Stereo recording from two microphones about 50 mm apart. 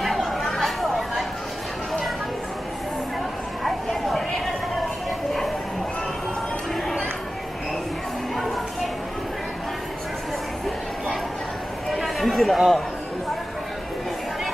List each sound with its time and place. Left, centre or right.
0.0 s chatter: centre
3.6 s a sound: centre
11.9 s chatter: centre